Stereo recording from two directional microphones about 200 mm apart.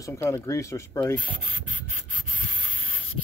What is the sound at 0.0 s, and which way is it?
Speech, 15° left (ahead or behind).